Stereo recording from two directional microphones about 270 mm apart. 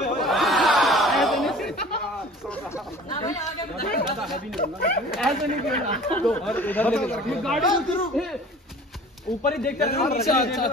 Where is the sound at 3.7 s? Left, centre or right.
Left.